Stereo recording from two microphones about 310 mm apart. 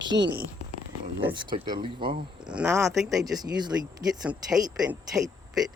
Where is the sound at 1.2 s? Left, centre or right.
Centre.